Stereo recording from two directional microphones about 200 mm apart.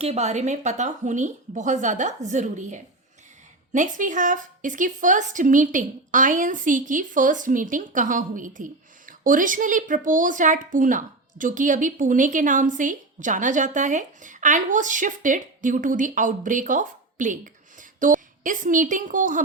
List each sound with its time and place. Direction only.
0.0 s speech: 35° right (ahead or behind)